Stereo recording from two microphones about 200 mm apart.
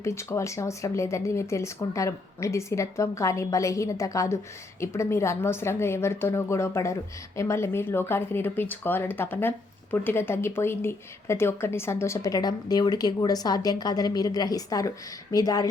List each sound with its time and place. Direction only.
0.0 s speech: 15° left (ahead or behind)